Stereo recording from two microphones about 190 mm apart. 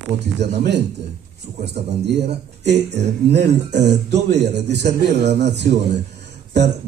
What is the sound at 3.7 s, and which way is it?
Speech, 65° right (ahead or behind).